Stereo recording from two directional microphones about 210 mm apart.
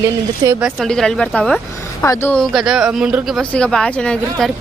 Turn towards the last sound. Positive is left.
turn(degrees=5)  # may be behind; listen again after turning